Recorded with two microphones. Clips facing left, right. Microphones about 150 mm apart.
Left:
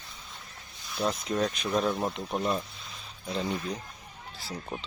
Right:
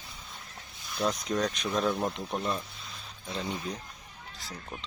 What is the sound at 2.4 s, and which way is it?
Speech, 15° left (ahead or behind).